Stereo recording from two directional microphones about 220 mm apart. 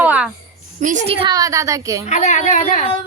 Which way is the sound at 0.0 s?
5° right (ahead or behind).